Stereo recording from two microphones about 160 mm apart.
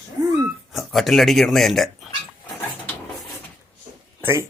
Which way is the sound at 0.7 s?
Centre (ahead or behind).